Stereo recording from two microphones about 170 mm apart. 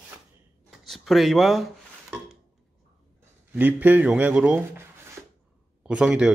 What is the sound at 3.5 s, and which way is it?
Speech, 10° right (ahead or behind).